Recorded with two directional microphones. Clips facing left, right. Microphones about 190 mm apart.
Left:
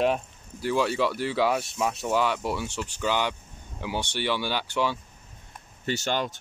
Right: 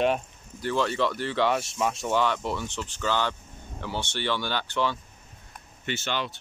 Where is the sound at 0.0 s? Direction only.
5° left (ahead or behind).